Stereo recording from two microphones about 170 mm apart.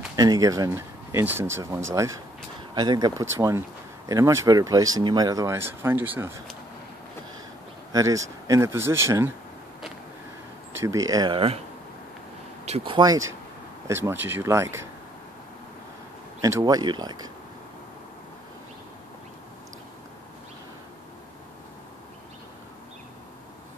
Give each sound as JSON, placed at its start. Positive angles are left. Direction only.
{"t": 0.1, "sound": "speech", "side_deg": -20}
{"t": 7.9, "sound": "speech", "side_deg": -20}
{"t": 10.8, "sound": "speech", "side_deg": -20}
{"t": 12.6, "sound": "speech", "side_deg": -35}
{"t": 16.3, "sound": "speech", "side_deg": -20}